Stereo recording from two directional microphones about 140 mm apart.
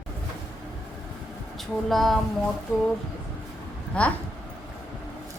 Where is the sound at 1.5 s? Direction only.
Centre (ahead or behind).